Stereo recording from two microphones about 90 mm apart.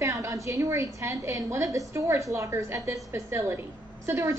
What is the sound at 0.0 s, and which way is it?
A woman's voice, 35° right (ahead or behind).